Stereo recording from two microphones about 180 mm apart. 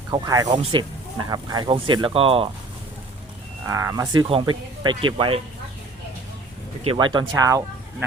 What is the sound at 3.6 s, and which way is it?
Speech, 15° right (ahead or behind).